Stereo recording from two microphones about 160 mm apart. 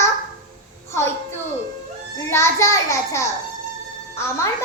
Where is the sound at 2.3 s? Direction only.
20° left (ahead or behind).